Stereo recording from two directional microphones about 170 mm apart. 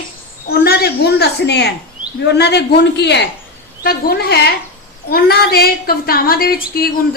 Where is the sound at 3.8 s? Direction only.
65° left (ahead or behind).